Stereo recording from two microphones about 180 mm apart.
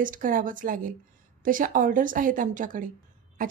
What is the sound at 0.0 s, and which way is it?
A woman's voice, 50° right (ahead or behind).